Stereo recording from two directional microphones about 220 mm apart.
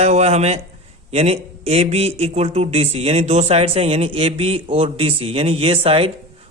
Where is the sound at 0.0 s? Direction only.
30° right (ahead or behind).